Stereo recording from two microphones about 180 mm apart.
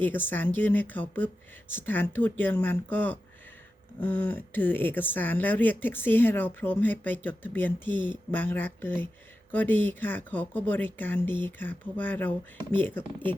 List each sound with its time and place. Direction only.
0.0 s speech: 10° left (ahead or behind)